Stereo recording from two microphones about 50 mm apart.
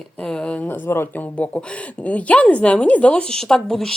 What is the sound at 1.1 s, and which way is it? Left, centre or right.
A woman's voice, left.